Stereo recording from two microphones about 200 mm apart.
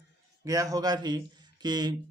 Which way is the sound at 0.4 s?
15° right (ahead or behind).